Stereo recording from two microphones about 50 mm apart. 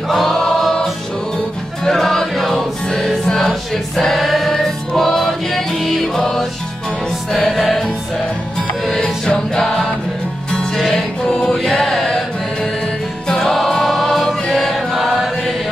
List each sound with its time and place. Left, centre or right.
0.1 s choir: centre
1.9 s music: centre
8.8 s music: centre
11.2 s choir: centre
13.3 s choir: centre